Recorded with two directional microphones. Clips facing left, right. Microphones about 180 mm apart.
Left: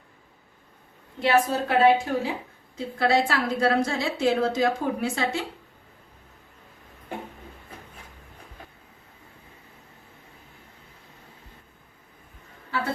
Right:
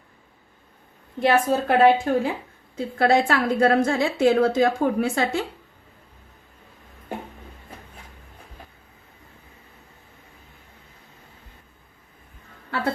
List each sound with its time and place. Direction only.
1.2 s a woman's voice: 55° right (ahead or behind)